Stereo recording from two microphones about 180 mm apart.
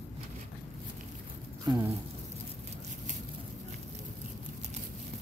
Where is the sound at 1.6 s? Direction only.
20° right (ahead or behind).